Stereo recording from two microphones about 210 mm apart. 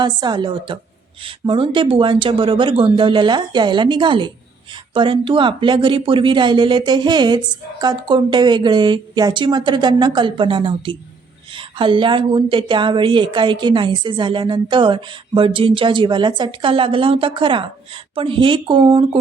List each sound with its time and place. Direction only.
0.0 s speech: 20° right (ahead or behind)